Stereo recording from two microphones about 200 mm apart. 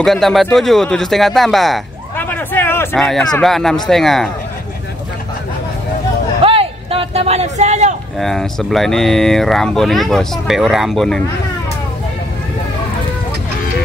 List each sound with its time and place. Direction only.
0.0 s speech: centre (ahead or behind)
6.4 s a sound: 30° right (ahead or behind)
8.2 s speech: centre (ahead or behind)